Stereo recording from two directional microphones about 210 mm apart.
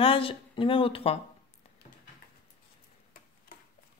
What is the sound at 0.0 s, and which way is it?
Speech, 25° left (ahead or behind).